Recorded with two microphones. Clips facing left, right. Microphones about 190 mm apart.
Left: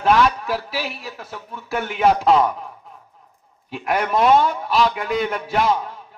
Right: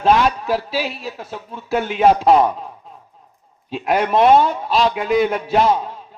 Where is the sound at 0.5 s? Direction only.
20° right (ahead or behind).